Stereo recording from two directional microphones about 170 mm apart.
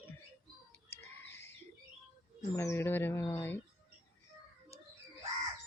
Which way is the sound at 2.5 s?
15° left (ahead or behind).